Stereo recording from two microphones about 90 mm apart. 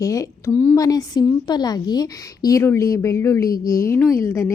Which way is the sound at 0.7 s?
45° left (ahead or behind).